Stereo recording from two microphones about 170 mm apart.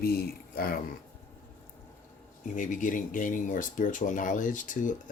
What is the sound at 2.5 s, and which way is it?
Speech, 50° left (ahead or behind).